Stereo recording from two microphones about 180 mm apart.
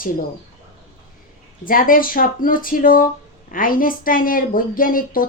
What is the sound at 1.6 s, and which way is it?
Speech, 50° left (ahead or behind).